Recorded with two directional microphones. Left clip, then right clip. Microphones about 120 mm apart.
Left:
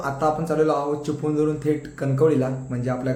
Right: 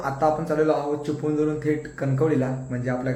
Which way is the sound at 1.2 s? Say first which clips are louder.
Left 2 dB; 20° left (ahead or behind).